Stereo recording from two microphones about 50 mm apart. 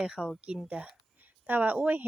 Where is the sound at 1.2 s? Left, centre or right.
Right.